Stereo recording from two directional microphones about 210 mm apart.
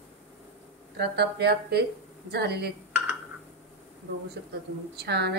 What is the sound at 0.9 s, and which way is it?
A woman's voice, 50° right (ahead or behind).